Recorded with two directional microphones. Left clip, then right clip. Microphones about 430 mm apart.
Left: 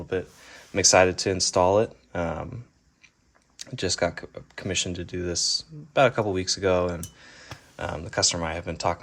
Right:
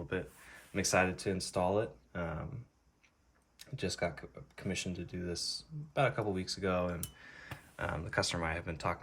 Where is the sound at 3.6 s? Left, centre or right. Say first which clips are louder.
Left 11 dB; centre.